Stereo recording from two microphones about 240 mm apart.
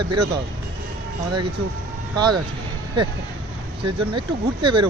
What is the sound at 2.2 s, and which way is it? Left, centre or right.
Speech, centre.